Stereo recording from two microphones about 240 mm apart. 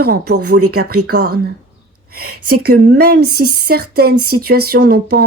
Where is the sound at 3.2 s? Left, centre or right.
Right.